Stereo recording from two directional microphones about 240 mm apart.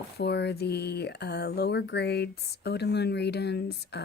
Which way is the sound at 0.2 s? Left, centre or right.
Left.